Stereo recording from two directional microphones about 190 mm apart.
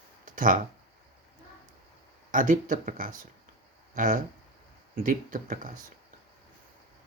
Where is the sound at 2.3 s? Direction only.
45° right (ahead or behind).